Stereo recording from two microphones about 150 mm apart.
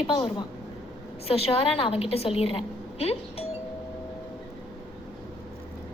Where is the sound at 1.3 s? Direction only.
40° left (ahead or behind).